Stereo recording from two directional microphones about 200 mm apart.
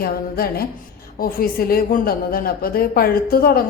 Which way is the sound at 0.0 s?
50° left (ahead or behind).